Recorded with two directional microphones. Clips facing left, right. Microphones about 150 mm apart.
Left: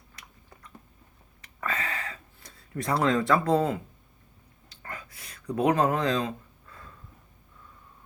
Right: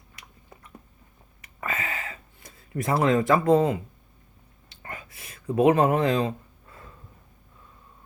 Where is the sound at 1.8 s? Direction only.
25° right (ahead or behind).